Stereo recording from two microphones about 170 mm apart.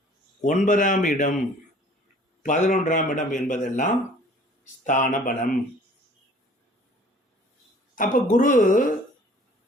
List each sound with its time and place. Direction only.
0.4 s a man's voice: 45° left (ahead or behind)
2.4 s a man's voice: 45° left (ahead or behind)
7.9 s a man's voice: 50° left (ahead or behind)